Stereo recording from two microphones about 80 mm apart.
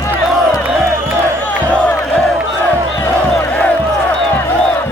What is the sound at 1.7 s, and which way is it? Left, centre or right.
Crowd, centre.